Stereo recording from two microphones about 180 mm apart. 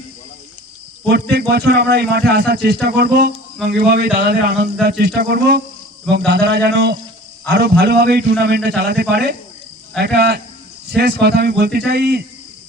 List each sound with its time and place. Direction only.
1.1 s speech: 65° right (ahead or behind)